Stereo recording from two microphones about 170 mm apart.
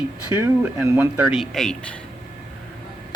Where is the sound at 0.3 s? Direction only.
10° right (ahead or behind).